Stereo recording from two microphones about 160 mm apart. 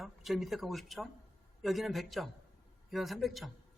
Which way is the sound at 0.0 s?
Centre (ahead or behind).